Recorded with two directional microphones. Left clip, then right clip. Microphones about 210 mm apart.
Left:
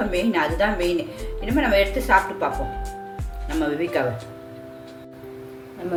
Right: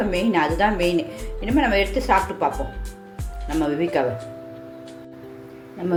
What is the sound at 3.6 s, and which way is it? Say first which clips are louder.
Speech: right 1 dB; 20° right (ahead or behind).